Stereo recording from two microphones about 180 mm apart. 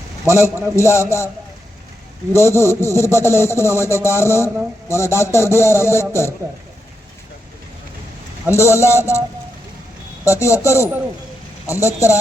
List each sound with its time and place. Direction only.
0.3 s speech: 15° left (ahead or behind)
2.3 s speech: 15° left (ahead or behind)
8.4 s speech: 15° left (ahead or behind)
10.2 s speech: 15° left (ahead or behind)